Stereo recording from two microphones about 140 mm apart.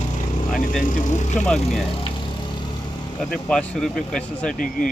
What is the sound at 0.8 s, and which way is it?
Speech, 70° left (ahead or behind).